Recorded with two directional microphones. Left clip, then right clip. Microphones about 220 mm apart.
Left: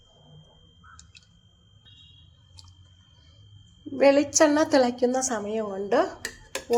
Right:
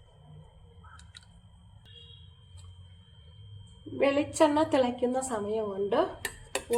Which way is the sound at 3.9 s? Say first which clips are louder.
Left 7 dB; 35° left (ahead or behind).